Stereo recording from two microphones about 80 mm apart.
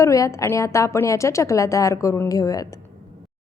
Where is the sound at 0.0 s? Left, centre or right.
Left.